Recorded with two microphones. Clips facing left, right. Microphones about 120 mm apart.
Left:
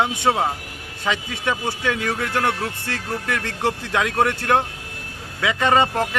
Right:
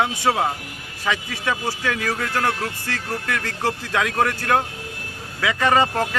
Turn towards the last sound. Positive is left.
turn(degrees=20)  # may be behind; listen again after turning